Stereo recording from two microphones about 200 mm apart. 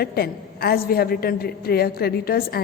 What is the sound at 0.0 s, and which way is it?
A woman's voice, 50° left (ahead or behind).